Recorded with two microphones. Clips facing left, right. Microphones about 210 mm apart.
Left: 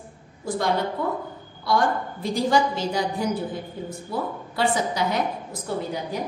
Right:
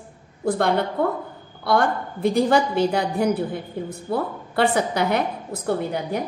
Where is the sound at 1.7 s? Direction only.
60° right (ahead or behind).